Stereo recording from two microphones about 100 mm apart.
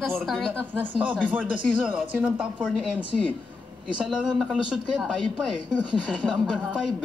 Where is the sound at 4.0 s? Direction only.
10° right (ahead or behind).